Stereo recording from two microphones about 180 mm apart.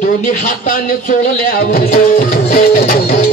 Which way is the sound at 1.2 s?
50° left (ahead or behind).